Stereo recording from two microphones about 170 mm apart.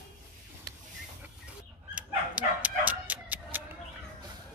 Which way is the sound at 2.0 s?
10° right (ahead or behind).